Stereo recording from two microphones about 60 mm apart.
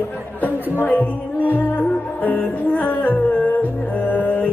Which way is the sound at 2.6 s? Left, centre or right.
Left.